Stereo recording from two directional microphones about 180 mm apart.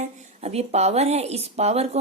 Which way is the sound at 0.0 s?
40° right (ahead or behind).